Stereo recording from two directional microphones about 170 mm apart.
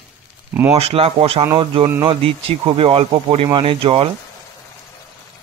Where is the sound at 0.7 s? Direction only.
35° right (ahead or behind).